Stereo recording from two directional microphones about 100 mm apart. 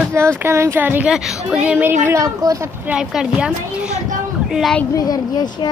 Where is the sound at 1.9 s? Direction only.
30° right (ahead or behind).